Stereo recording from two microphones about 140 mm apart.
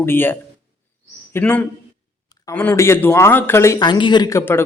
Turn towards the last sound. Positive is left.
turn(degrees=15)  # may be behind; listen again after turning